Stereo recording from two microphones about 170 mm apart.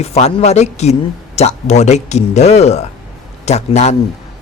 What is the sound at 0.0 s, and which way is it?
Speech, 40° left (ahead or behind).